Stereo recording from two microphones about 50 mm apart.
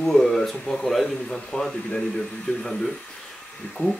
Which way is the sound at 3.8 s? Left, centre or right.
Left.